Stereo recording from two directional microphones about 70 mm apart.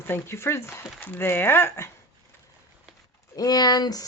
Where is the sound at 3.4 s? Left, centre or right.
Left.